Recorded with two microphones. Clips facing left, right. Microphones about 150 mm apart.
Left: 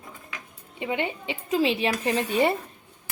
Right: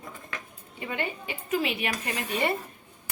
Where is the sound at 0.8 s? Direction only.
20° left (ahead or behind).